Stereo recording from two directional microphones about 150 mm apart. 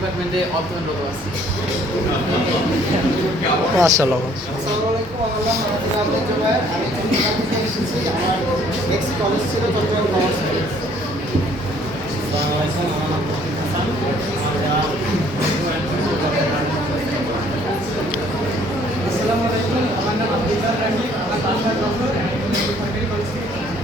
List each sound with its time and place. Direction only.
3.8 s a man's voice: 20° right (ahead or behind)